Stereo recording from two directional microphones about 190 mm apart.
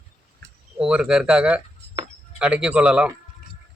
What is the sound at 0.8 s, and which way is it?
Speech, 5° right (ahead or behind).